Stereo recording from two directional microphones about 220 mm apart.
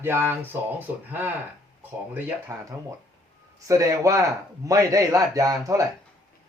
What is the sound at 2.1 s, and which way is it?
Speech, 15° right (ahead or behind).